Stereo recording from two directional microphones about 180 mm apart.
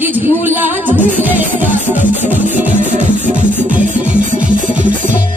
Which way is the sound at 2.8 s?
45° right (ahead or behind).